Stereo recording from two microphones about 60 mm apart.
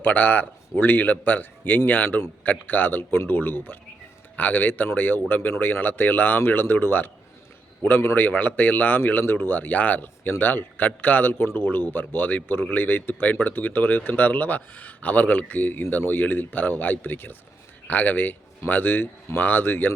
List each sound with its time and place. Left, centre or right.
0.0 s a man's voice: left